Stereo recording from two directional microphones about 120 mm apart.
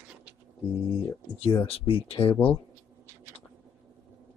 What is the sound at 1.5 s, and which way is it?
Speech, 50° left (ahead or behind).